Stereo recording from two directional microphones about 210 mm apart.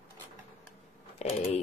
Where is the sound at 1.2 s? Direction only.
30° left (ahead or behind).